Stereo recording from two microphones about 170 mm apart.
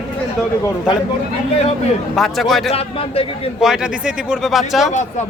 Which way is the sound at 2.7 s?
35° left (ahead or behind).